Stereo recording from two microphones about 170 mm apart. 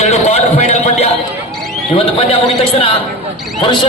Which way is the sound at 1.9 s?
35° left (ahead or behind).